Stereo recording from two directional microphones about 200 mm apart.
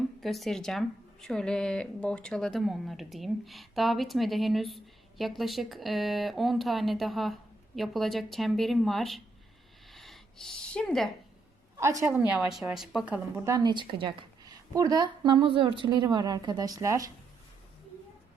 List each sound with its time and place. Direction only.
0.2 s speech: centre (ahead or behind)
9.9 s a sound: centre (ahead or behind)
11.8 s a woman's voice: 15° right (ahead or behind)
12.3 s a woman's voice: 5° right (ahead or behind)